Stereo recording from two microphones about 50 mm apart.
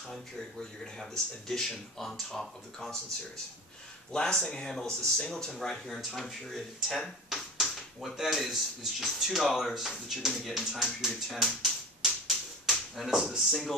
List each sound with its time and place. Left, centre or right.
0.6 s speech: centre
4.1 s speech: centre
7.2 s finger snapping: centre
7.6 s speech: centre
12.0 s a sound: centre
13.4 s speech: centre